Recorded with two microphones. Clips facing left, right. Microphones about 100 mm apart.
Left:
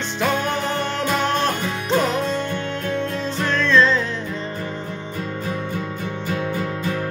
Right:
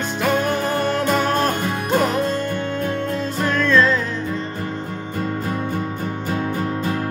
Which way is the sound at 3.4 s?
10° right (ahead or behind).